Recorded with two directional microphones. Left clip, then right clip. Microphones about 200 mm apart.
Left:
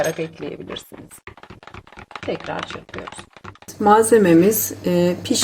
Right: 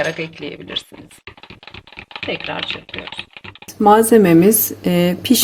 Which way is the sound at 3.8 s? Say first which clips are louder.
Right 3 dB; 35° right (ahead or behind).